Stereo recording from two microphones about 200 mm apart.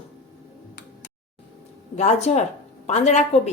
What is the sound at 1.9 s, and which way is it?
Speech, 35° left (ahead or behind).